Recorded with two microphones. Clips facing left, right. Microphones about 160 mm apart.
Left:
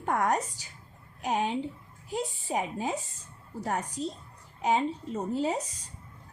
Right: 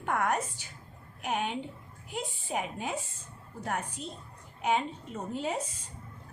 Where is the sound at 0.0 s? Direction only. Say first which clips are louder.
Left 2 dB; 35° left (ahead or behind).